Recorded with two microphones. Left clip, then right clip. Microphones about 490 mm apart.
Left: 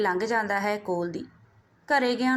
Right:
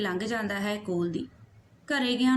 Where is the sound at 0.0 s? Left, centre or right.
Right.